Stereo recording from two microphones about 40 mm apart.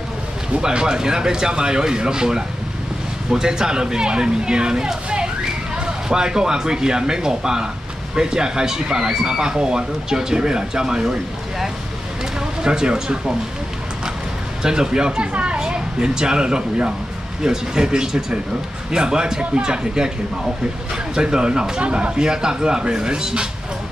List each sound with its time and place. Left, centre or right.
0.5 s speech: right
12.4 s speech: centre
14.6 s speech: centre
15.6 s a woman's voice: centre
21.1 s speech: right